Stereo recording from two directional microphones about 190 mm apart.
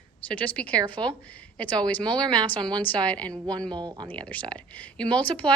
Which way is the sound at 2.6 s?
25° right (ahead or behind).